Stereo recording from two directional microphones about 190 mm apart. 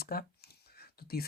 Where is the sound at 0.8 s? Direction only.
55° left (ahead or behind).